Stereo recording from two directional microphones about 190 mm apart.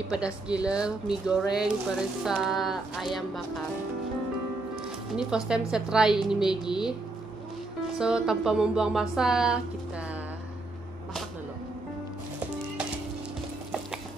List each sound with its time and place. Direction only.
0.1 s speech: 5° right (ahead or behind)
5.1 s speech: 5° right (ahead or behind)
8.0 s speech: 5° right (ahead or behind)